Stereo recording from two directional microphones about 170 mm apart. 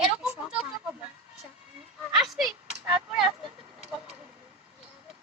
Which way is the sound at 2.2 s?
Centre (ahead or behind).